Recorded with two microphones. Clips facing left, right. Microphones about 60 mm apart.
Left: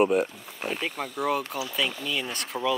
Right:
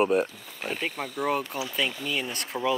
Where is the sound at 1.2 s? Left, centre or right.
Centre.